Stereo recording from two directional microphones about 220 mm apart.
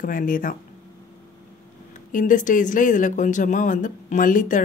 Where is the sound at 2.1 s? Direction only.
35° left (ahead or behind).